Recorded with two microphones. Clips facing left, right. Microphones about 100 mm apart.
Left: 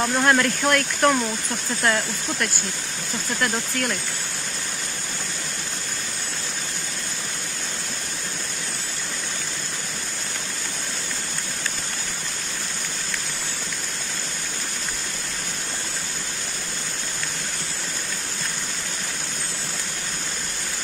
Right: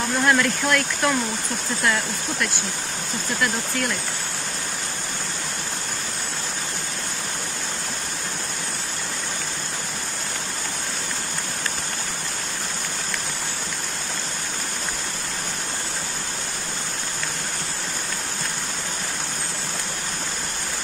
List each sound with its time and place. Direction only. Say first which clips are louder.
0.2 s speech: right 1 dB; 45° left (ahead or behind)